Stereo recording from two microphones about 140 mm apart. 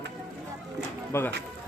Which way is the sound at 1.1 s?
15° left (ahead or behind).